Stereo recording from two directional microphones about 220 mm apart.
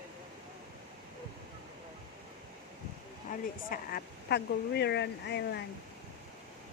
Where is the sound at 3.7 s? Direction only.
45° left (ahead or behind).